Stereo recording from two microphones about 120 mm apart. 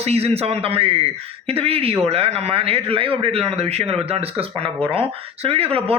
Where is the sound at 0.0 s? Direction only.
60° right (ahead or behind).